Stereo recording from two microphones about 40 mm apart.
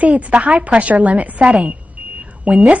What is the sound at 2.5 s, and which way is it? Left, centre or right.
Speech, right.